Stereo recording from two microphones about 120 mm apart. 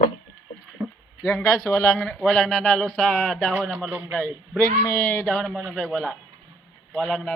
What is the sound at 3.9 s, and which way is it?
Speech, 15° right (ahead or behind).